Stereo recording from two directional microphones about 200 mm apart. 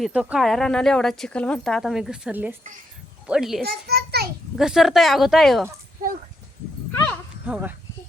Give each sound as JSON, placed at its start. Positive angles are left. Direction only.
{"t": 0.0, "sound": "speech", "side_deg": -5}
{"t": 3.6, "sound": "children playing", "side_deg": -50}
{"t": 4.5, "sound": "speech", "side_deg": 0}
{"t": 7.4, "sound": "speech", "side_deg": -5}